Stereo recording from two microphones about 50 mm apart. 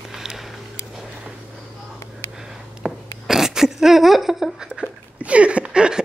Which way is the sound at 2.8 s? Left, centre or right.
Centre.